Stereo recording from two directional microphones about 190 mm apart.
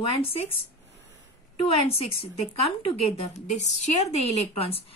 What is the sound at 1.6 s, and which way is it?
A woman's voice, 30° left (ahead or behind).